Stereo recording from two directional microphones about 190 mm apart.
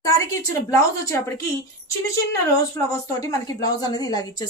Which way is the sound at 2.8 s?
15° left (ahead or behind).